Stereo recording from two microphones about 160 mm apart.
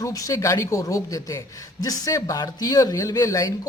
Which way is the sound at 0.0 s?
20° left (ahead or behind).